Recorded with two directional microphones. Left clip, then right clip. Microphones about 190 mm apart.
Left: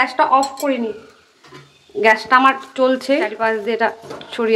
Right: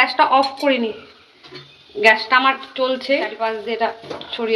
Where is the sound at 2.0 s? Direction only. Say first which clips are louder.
Left 1 dB; 35° left (ahead or behind).